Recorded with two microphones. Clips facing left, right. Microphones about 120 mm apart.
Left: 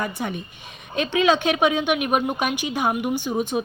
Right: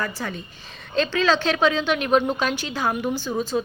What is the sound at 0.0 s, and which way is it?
A woman's voice, 20° left (ahead or behind).